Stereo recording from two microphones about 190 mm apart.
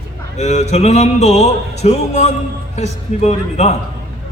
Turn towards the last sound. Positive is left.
turn(degrees=35)  # may be behind; listen again after turning